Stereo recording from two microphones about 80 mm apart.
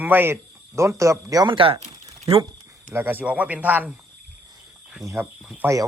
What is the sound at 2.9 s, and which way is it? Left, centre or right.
Speech, right.